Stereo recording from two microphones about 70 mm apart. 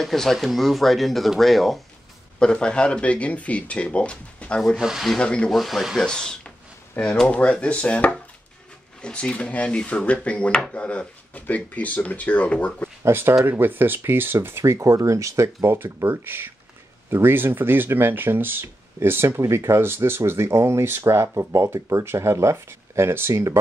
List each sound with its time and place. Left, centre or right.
0.0 s speech: centre
2.3 s speech: centre
4.7 s speech: centre
5.1 s speech: centre
5.5 s speech: centre
6.0 s speech: centre
13.0 s speech: right
14.6 s speech: right